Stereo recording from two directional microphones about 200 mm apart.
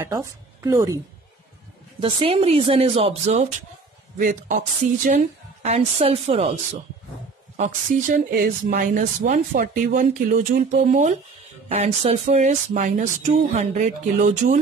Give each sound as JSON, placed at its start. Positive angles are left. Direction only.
{"t": 0.0, "sound": "a woman's voice", "side_deg": -15}
{"t": 2.0, "sound": "speech", "side_deg": -25}
{"t": 8.3, "sound": "speech", "side_deg": -45}